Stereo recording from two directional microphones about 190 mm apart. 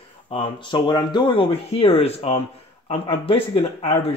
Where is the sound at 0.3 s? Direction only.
25° left (ahead or behind).